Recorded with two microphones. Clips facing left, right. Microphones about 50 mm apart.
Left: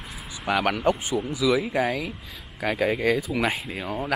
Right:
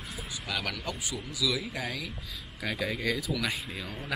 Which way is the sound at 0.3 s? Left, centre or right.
Left.